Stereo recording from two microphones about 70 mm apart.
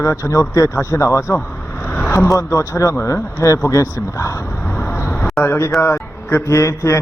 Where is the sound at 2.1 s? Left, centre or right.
Left.